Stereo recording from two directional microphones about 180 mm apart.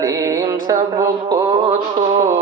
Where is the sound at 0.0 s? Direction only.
20° right (ahead or behind).